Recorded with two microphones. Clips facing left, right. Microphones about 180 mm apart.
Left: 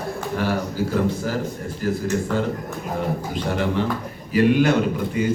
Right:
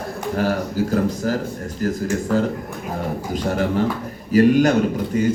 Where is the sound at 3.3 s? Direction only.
40° right (ahead or behind).